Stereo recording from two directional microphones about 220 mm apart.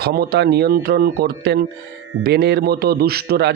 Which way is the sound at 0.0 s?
45° right (ahead or behind).